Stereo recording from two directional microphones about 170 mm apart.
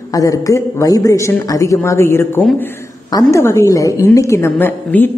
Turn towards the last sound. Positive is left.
turn(degrees=10)  # may be behind; listen again after turning